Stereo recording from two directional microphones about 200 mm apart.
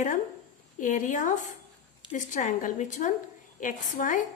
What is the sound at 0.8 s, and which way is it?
Speech, 40° left (ahead or behind).